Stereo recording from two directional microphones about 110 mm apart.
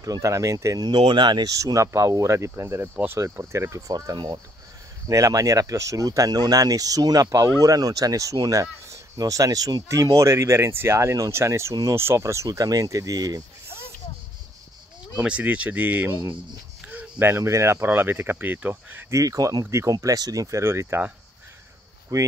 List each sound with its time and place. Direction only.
0.0 s speech: 30° right (ahead or behind)
0.8 s speech: 45° right (ahead or behind)
15.1 s speech: 15° right (ahead or behind)
19.1 s speech: 35° right (ahead or behind)
22.1 s speech: 30° right (ahead or behind)